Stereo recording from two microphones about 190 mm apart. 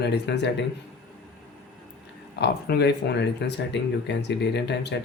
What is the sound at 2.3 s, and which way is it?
Speech, 60° left (ahead or behind).